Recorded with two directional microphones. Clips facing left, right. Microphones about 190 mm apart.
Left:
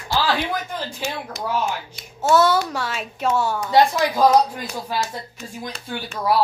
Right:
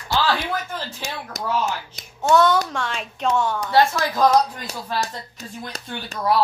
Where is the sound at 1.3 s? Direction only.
45° right (ahead or behind).